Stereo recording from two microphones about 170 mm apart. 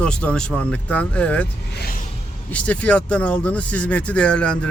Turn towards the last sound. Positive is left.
turn(degrees=5)  # may be behind; listen again after turning